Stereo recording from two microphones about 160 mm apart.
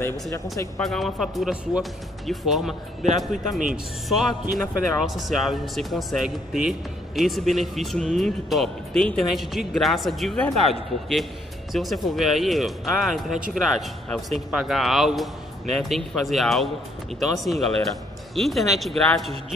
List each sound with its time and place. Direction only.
0.0 s speech: 20° left (ahead or behind)
0.7 s speech: centre (ahead or behind)